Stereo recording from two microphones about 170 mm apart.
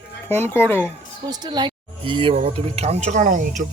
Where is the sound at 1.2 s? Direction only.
25° right (ahead or behind); by 3.6 s 50° right (ahead or behind).